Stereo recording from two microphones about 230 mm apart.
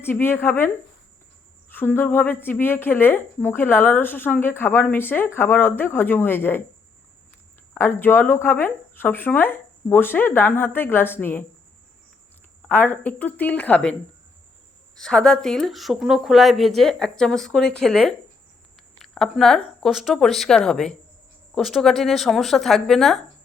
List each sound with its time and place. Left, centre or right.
0.0 s a woman's voice: centre
1.7 s a woman's voice: centre
7.7 s a woman's voice: centre
12.6 s a woman's voice: centre
14.9 s speech: centre